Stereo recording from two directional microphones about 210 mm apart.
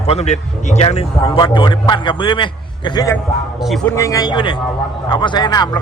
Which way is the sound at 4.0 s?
15° left (ahead or behind).